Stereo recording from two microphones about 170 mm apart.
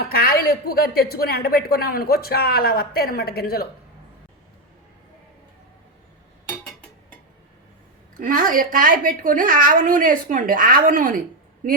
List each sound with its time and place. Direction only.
0.1 s speech: 65° left (ahead or behind)
8.1 s a woman's voice: 50° right (ahead or behind)